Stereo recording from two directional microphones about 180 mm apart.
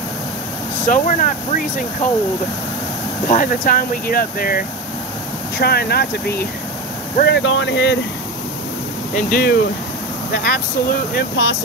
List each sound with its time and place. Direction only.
0.8 s speech: 45° left (ahead or behind)
3.3 s speech: 45° left (ahead or behind); by 8.0 s 75° left (ahead or behind)
9.1 s speech: 55° left (ahead or behind)